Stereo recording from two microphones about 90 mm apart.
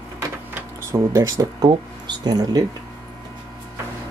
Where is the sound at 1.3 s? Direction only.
50° right (ahead or behind).